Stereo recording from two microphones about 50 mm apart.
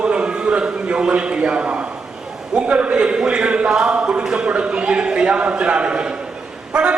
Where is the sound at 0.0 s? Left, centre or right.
Right.